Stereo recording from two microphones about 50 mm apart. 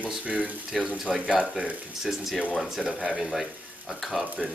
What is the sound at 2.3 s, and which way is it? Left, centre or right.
Speech, left.